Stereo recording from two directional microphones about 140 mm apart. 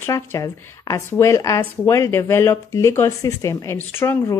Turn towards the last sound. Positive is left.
turn(degrees=15)  # may be behind; listen again after turning